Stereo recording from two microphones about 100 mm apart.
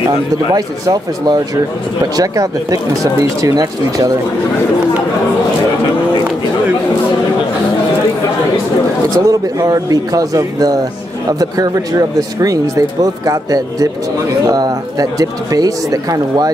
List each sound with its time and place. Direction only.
0.6 s speech: 40° right (ahead or behind)
9.1 s speech: 35° right (ahead or behind)